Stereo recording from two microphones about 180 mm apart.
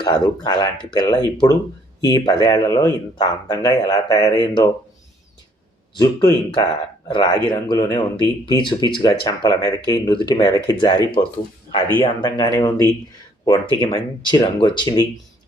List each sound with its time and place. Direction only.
0.0 s speech: 25° left (ahead or behind)
6.0 s speech: 25° left (ahead or behind)